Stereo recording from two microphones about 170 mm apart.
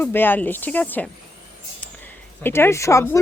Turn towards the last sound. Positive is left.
turn(degrees=15)  # may be behind; listen again after turning